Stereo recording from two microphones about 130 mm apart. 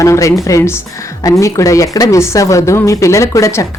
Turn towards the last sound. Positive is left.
turn(degrees=25)  # may be behind; listen again after turning